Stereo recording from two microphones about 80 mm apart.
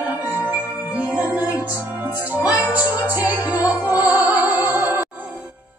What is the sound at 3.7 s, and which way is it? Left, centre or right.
Music, left.